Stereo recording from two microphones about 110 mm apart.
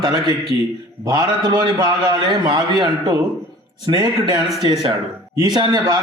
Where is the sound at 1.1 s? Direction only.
40° right (ahead or behind).